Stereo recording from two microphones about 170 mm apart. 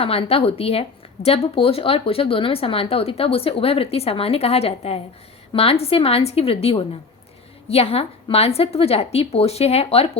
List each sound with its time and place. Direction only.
0.0 s a woman's voice: 35° left (ahead or behind)